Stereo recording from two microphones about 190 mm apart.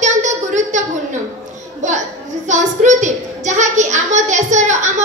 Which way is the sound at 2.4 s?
40° right (ahead or behind).